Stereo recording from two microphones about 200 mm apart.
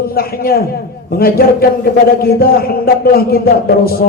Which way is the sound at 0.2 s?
50° left (ahead or behind).